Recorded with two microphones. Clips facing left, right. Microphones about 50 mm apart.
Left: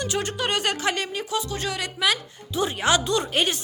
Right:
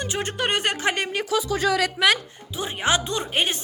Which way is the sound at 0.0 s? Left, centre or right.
Right.